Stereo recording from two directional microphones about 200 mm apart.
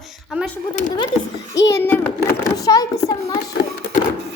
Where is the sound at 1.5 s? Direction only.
15° left (ahead or behind).